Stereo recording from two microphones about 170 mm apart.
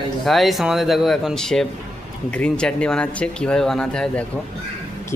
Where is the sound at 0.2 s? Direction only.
Centre (ahead or behind).